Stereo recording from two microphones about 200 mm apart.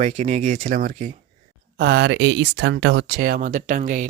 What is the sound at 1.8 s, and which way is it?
Speech, 50° right (ahead or behind).